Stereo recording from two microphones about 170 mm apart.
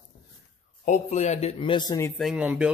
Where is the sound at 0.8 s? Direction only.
45° left (ahead or behind); by 2.1 s 20° left (ahead or behind).